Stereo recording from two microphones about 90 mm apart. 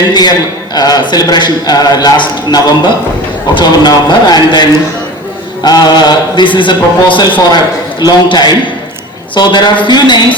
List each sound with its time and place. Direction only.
0.1 s a man's voice: 50° left (ahead or behind)
5.6 s a man's voice: 50° left (ahead or behind)